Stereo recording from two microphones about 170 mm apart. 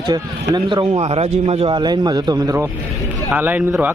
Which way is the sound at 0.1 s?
25° right (ahead or behind).